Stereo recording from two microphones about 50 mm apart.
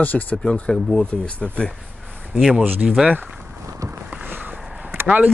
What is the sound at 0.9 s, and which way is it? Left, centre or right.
Speech, left.